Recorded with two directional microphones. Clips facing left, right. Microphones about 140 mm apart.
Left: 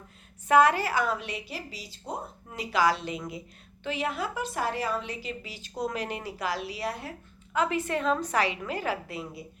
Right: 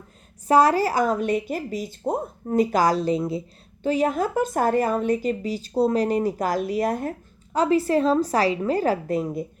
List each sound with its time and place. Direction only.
0.4 s speech: 35° right (ahead or behind)
7.5 s a woman's voice: 35° right (ahead or behind)